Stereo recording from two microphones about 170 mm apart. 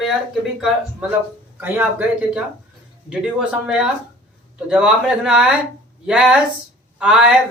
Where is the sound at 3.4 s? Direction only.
5° right (ahead or behind).